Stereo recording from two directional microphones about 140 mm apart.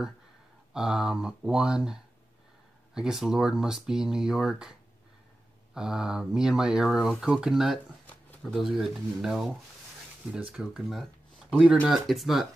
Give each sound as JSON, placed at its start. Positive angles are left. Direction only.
{"t": 0.7, "sound": "speech", "side_deg": -5}
{"t": 5.8, "sound": "speech", "side_deg": -5}
{"t": 8.1, "sound": "speech", "side_deg": 5}